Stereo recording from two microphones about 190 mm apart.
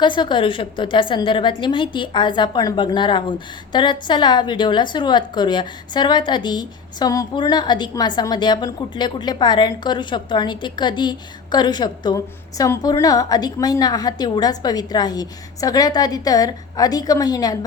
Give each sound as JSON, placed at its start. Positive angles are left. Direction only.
{"t": 0.0, "sound": "a woman's voice", "side_deg": 25}